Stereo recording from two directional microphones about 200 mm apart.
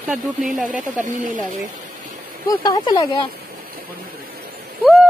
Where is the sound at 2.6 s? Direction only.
20° left (ahead or behind).